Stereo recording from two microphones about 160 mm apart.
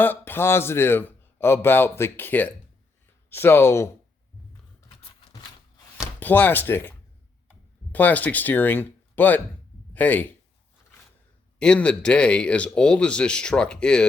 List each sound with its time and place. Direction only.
0.0 s speech: 10° left (ahead or behind)
5.3 s a sound: 25° left (ahead or behind)
6.1 s speech: 10° left (ahead or behind)
7.9 s speech: 10° left (ahead or behind)
11.6 s speech: 5° left (ahead or behind)